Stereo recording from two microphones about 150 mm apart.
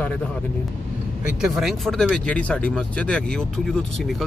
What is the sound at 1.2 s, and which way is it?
Speech, 5° right (ahead or behind).